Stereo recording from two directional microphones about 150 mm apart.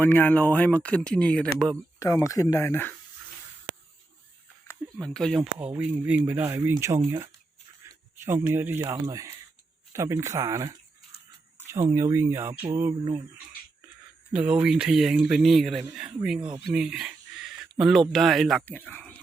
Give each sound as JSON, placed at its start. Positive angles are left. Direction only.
{"t": 0.0, "sound": "speech", "side_deg": 10}
{"t": 2.0, "sound": "speech", "side_deg": 20}
{"t": 4.9, "sound": "speech", "side_deg": 5}
{"t": 5.4, "sound": "speech", "side_deg": -10}
{"t": 14.3, "sound": "speech", "side_deg": -5}
{"t": 16.7, "sound": "a sound", "side_deg": -5}
{"t": 18.1, "sound": "speech", "side_deg": 0}
{"t": 18.6, "sound": "speech", "side_deg": 10}